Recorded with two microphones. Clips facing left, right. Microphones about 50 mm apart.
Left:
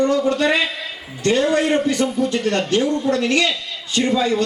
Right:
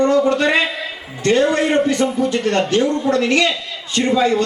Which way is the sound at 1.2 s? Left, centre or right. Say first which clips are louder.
Right 3 dB; right.